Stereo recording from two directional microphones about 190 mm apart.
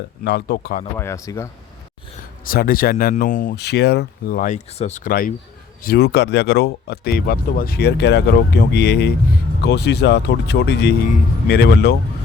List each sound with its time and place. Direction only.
0.3 s speech: 60° left (ahead or behind)
0.9 s speech: 15° left (ahead or behind)
2.4 s speech: 50° left (ahead or behind)